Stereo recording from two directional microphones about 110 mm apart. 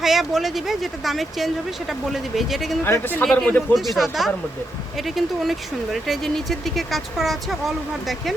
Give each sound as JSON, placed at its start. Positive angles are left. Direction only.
{"t": 0.0, "sound": "speech", "side_deg": -5}
{"t": 2.8, "sound": "speech", "side_deg": 20}
{"t": 3.8, "sound": "speech", "side_deg": 0}